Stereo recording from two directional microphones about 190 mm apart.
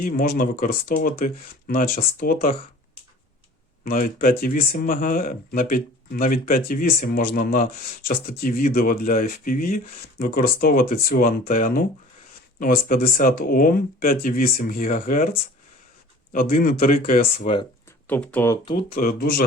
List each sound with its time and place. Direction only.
0.0 s speech: 45° left (ahead or behind)
3.8 s speech: 45° left (ahead or behind)
17.4 s speech: 25° left (ahead or behind)
18.1 s speech: 10° left (ahead or behind)
18.9 s speech: 50° left (ahead or behind)